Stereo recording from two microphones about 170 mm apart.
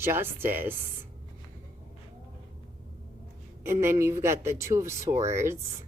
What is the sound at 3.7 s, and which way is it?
Speech, 15° right (ahead or behind).